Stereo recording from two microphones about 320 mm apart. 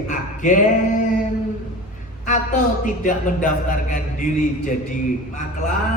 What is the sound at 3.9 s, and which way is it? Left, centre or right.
Speech, left.